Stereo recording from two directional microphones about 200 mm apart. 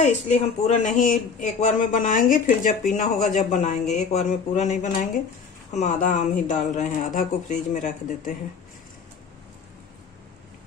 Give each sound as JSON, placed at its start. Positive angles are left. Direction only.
{"t": 0.0, "sound": "speech", "side_deg": 35}